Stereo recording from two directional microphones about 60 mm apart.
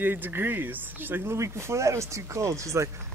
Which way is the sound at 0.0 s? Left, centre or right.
Right.